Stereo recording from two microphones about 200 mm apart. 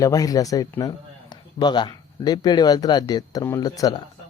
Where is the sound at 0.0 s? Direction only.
15° left (ahead or behind).